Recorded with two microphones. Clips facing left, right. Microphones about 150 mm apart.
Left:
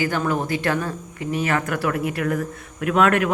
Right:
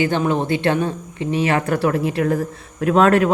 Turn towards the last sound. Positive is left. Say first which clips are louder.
# right 4 dB
turn(degrees=-30)  # may be behind; listen again after turning